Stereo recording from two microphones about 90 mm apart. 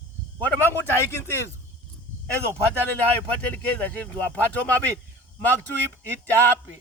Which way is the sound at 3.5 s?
15° left (ahead or behind).